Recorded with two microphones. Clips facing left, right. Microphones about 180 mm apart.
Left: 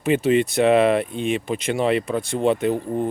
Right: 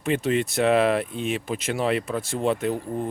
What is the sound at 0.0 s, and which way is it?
Speech, 5° left (ahead or behind).